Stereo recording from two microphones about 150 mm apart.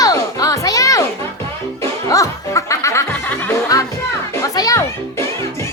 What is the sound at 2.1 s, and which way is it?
Music, 20° left (ahead or behind).